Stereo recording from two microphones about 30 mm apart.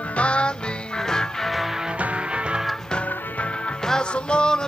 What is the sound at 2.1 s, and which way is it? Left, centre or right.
Music, right.